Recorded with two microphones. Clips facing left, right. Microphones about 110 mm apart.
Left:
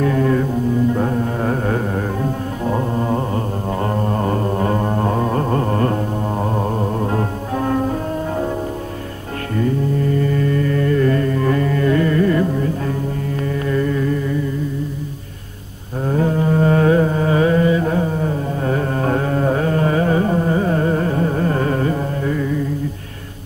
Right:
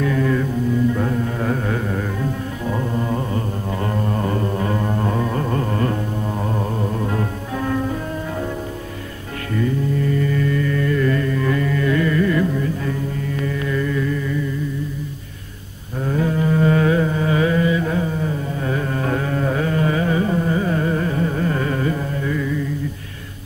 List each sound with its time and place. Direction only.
0.0 s music: 40° left (ahead or behind)
9.6 s mantra: 40° left (ahead or behind)
16.1 s carnatic music: 35° left (ahead or behind)